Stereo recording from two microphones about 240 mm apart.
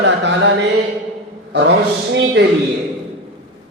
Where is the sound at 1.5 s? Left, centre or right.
Right.